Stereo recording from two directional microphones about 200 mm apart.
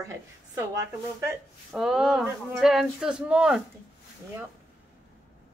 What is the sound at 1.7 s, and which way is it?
Speech, centre (ahead or behind).